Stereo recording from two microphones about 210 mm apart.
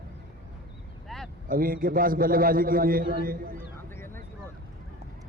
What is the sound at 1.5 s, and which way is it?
A man's voice, 45° right (ahead or behind).